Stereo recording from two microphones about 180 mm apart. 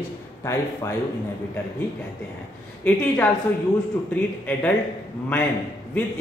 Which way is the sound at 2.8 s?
10° left (ahead or behind).